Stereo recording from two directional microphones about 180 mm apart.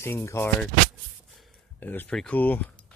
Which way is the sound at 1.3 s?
10° left (ahead or behind).